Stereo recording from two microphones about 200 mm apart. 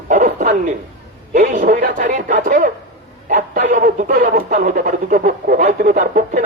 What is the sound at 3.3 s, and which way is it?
Speech, 40° right (ahead or behind).